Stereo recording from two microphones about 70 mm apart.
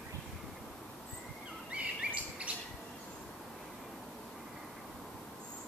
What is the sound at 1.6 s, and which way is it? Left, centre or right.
Bird vocalization, centre.